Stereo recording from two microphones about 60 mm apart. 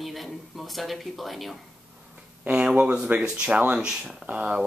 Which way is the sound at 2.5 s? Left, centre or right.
Centre.